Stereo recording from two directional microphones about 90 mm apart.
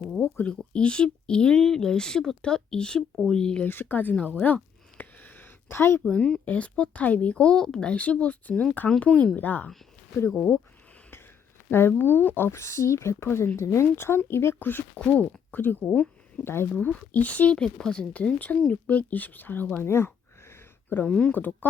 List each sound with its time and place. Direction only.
0.2 s speech: 20° left (ahead or behind)
0.7 s speech: 10° left (ahead or behind)
3.7 s speech: 25° left (ahead or behind)
4.4 s a sound: 20° left (ahead or behind)
6.1 s speech: 10° left (ahead or behind)
11.7 s speech: 25° left (ahead or behind)
19.8 s a sound: 30° left (ahead or behind)
21.1 s speech: 10° left (ahead or behind)